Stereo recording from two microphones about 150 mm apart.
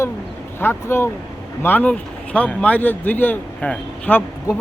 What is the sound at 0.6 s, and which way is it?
A man's voice, 15° left (ahead or behind).